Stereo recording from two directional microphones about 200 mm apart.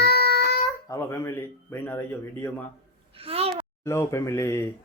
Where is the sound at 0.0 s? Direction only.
55° left (ahead or behind).